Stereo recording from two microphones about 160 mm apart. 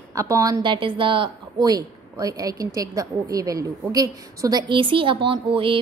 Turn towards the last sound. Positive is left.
turn(degrees=-35)  # may be behind; listen again after turning